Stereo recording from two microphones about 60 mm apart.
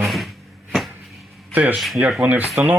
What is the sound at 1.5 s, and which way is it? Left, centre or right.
Speech, right.